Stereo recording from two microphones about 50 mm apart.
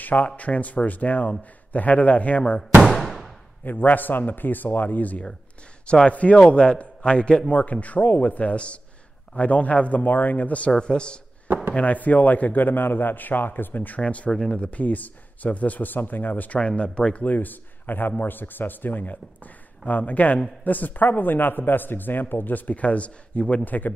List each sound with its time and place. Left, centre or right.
0.0 s a man's voice: left
2.8 s a sound: centre
3.6 s a man's voice: left
5.9 s a man's voice: left
10.7 s speech: centre
11.7 s a man's voice: left
14.0 s speech: left
14.3 s speech: centre
14.6 s a man's voice: left
16.5 s speech: left
17.2 s a man's voice: left